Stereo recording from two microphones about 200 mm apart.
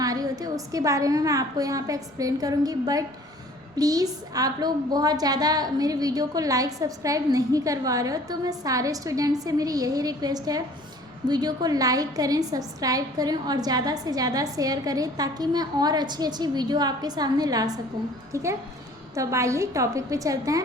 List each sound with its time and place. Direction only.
0.0 s a woman's voice: 20° right (ahead or behind)
19.1 s a woman's voice: 15° right (ahead or behind)